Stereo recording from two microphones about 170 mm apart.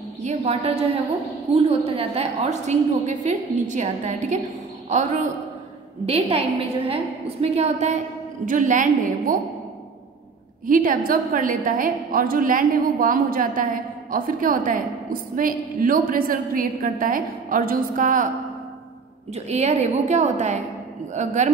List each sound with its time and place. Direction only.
0.2 s a woman's voice: 40° right (ahead or behind)
10.7 s a woman's voice: 55° right (ahead or behind)
19.3 s a woman's voice: 40° right (ahead or behind)